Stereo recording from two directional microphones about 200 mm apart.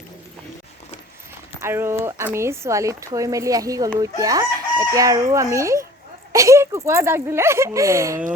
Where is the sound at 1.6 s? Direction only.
10° right (ahead or behind).